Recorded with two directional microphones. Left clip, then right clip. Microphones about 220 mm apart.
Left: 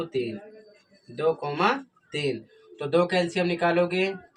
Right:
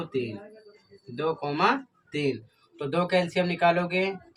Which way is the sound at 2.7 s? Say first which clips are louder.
Left 2 dB; 20° right (ahead or behind).